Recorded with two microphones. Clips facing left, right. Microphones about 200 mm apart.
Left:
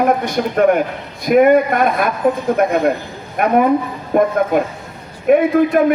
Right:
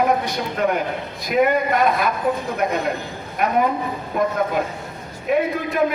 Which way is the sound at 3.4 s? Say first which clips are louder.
Left 6 dB; 50° left (ahead or behind).